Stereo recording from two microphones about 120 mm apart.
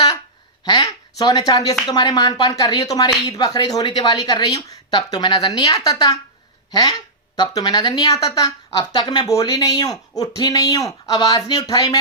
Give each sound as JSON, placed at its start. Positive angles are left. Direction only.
{"t": 0.6, "sound": "a woman's voice", "side_deg": 35}